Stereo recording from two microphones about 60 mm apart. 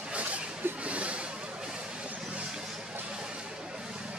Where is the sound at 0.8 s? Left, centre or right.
Right.